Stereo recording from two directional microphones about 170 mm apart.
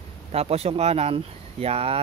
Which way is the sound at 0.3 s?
35° right (ahead or behind).